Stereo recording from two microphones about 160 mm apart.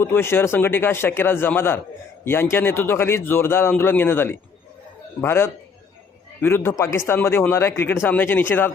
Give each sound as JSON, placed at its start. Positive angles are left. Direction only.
{"t": 0.0, "sound": "speech", "side_deg": 15}